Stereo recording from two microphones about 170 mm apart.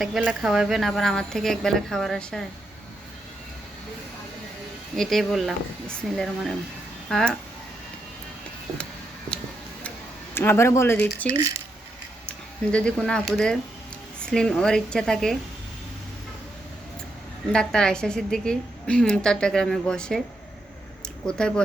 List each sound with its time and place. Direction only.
0.0 s a woman's voice: 5° right (ahead or behind)
4.9 s a woman's voice: centre (ahead or behind)
10.3 s speech: 15° left (ahead or behind)
11.3 s speech: 20° right (ahead or behind)
12.7 s a woman's voice: 5° left (ahead or behind)
17.5 s a woman's voice: 5° left (ahead or behind)
21.2 s a woman's voice: 5° left (ahead or behind)